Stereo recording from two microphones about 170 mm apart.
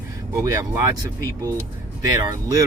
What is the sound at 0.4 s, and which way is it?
Speech, 20° right (ahead or behind).